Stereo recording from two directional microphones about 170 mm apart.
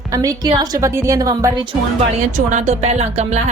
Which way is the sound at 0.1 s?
20° right (ahead or behind).